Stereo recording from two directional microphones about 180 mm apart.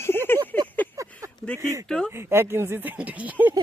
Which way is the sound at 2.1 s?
15° right (ahead or behind).